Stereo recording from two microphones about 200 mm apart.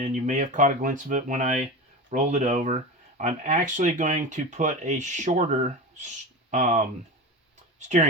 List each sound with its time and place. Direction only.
0.0 s speech: 35° right (ahead or behind)